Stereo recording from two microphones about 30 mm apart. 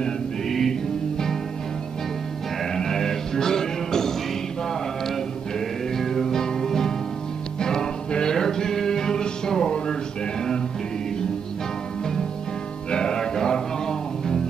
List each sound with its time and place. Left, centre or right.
0.5 s music: centre
2.6 s music: centre
5.9 s music: centre
12.9 s music: left